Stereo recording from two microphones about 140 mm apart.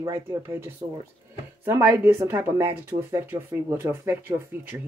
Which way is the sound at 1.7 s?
15° right (ahead or behind).